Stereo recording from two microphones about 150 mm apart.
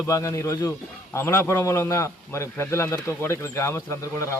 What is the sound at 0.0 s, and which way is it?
A man's voice, 20° left (ahead or behind).